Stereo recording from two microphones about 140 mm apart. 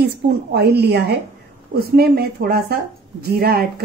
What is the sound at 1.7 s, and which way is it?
Speech, 90° right.